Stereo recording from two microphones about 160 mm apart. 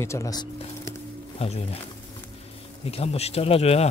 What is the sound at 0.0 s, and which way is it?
Speech, 20° left (ahead or behind).